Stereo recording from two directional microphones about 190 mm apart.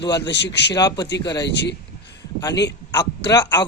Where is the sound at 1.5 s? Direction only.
65° left (ahead or behind).